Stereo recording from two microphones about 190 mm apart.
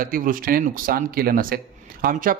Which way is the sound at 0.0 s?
45° right (ahead or behind).